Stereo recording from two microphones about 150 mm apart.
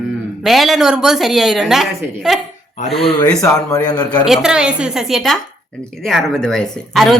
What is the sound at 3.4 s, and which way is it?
Speech, 20° left (ahead or behind).